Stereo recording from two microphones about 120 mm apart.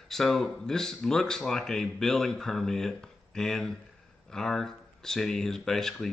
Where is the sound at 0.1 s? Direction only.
Centre (ahead or behind).